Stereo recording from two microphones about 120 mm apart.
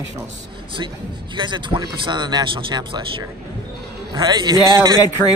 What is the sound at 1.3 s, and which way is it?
Speech, 40° right (ahead or behind).